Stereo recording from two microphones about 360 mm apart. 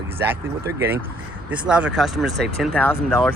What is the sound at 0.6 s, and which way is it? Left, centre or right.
Speech, centre.